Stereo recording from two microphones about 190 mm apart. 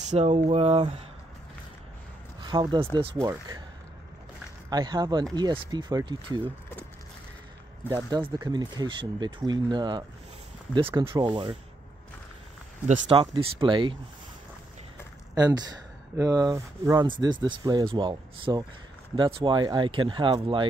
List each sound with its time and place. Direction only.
0.1 s speech: 35° right (ahead or behind)
2.4 s speech: 20° right (ahead or behind)
4.6 s speech: 20° right (ahead or behind)
7.9 s speech: 20° right (ahead or behind)
13.1 s speech: 25° right (ahead or behind)
15.3 s speech: 20° right (ahead or behind)